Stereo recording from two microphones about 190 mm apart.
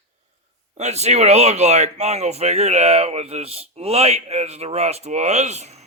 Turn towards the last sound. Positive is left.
turn(degrees=-35)  # may be behind; listen again after turning